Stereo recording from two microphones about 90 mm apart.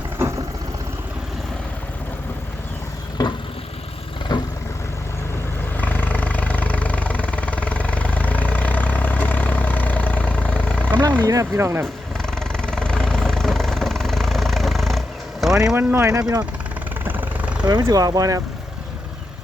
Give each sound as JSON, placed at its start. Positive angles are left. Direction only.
{"t": 3.2, "sound": "vehicle", "side_deg": 50}
{"t": 5.7, "sound": "vehicle", "side_deg": 20}
{"t": 11.3, "sound": "speech", "side_deg": -35}
{"t": 12.1, "sound": "vehicle", "side_deg": 5}
{"t": 15.7, "sound": "speech", "side_deg": -25}
{"t": 16.2, "sound": "speech", "side_deg": -45}
{"t": 17.0, "sound": "vehicle", "side_deg": -20}
{"t": 17.6, "sound": "speech", "side_deg": -50}